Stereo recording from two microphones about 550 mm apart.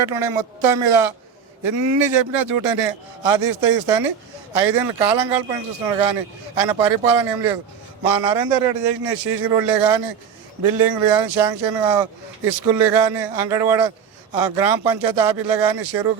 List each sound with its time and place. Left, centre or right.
0.0 s speech: right
1.6 s a man's voice: right